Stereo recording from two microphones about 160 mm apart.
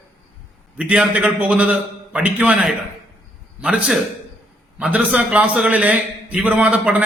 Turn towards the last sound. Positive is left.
turn(degrees=-10)  # may be behind; listen again after turning